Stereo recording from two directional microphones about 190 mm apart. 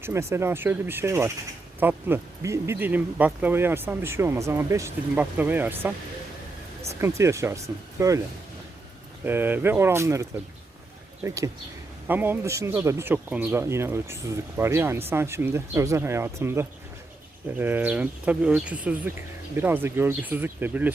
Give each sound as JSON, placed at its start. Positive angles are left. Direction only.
{"t": 0.0, "sound": "speech", "side_deg": -15}
{"t": 7.0, "sound": "speech", "side_deg": -15}
{"t": 9.2, "sound": "speech", "side_deg": -10}